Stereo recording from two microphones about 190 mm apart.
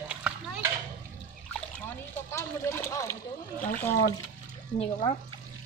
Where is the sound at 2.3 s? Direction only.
15° left (ahead or behind).